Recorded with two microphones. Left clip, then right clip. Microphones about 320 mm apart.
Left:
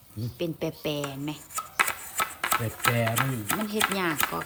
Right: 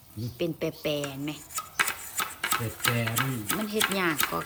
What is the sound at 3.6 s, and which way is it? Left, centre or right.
Speech, centre.